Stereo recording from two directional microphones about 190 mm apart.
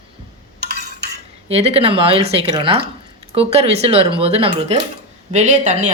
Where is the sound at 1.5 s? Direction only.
30° right (ahead or behind).